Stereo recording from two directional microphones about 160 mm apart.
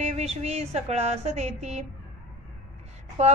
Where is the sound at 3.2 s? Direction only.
40° right (ahead or behind).